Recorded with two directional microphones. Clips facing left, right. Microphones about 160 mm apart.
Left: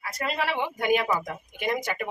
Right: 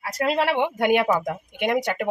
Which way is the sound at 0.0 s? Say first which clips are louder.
Right 7 dB; 75° right (ahead or behind).